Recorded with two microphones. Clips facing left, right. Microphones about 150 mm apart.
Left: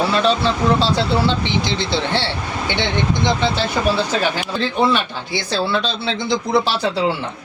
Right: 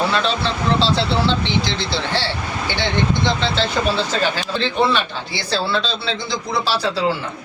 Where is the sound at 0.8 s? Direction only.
10° left (ahead or behind).